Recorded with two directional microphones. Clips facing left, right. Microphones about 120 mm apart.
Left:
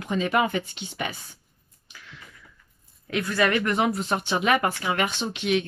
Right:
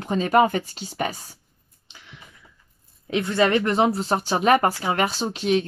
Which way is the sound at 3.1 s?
25° right (ahead or behind).